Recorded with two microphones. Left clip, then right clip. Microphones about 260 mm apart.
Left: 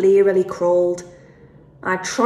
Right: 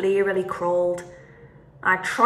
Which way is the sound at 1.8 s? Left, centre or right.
Right.